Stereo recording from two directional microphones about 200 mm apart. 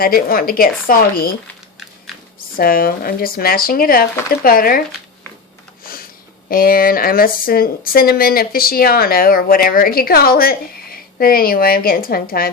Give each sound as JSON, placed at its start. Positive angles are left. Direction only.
{"t": 0.0, "sound": "speech", "side_deg": 45}
{"t": 2.6, "sound": "speech", "side_deg": 45}
{"t": 5.8, "sound": "a sound", "side_deg": 45}
{"t": 6.5, "sound": "speech", "side_deg": 45}